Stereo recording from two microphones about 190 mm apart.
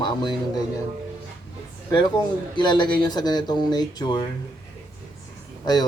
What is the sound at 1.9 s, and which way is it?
A man's voice, 20° left (ahead or behind).